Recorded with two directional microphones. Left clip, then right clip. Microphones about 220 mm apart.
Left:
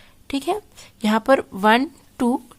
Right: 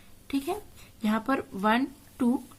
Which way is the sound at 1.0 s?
45° left (ahead or behind).